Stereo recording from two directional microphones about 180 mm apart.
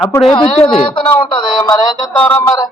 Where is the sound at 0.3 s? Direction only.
25° left (ahead or behind).